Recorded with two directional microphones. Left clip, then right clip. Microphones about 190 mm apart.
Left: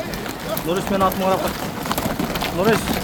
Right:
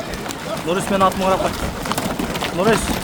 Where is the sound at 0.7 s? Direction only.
15° right (ahead or behind).